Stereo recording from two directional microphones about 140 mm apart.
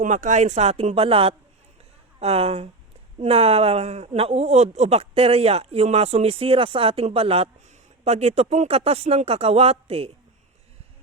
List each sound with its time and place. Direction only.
0.0 s speech: 60° right (ahead or behind)